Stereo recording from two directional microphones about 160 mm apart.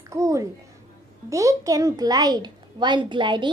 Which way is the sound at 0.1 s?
20° right (ahead or behind).